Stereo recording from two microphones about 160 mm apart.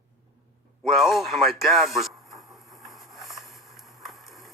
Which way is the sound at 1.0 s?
Centre (ahead or behind).